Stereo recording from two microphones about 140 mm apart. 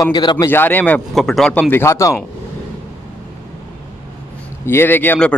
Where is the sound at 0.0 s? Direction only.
30° left (ahead or behind).